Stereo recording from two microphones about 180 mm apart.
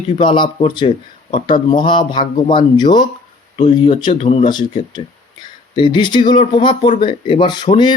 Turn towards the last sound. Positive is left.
turn(degrees=25)  # may be behind; listen again after turning